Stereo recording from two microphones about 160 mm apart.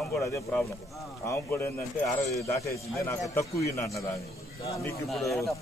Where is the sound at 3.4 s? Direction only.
20° left (ahead or behind).